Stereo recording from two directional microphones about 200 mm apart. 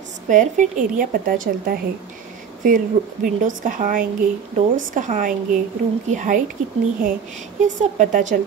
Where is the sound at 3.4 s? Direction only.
45° right (ahead or behind).